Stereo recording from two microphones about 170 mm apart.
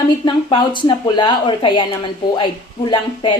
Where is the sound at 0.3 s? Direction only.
25° left (ahead or behind).